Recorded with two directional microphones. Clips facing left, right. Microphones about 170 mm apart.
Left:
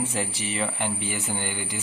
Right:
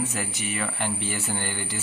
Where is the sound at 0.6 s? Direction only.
15° left (ahead or behind).